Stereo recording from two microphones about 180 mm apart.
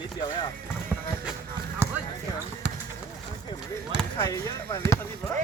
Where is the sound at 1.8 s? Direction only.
15° right (ahead or behind).